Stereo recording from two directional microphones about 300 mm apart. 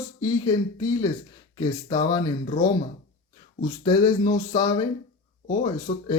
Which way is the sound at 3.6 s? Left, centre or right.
Centre.